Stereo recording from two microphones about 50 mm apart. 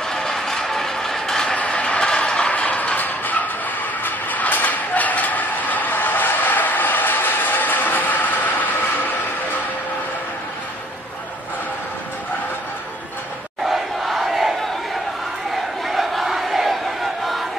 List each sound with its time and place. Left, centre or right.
0.0 s mechanisms: centre
1.6 s a sound: left
13.7 s crowd: centre
15.8 s crowd: centre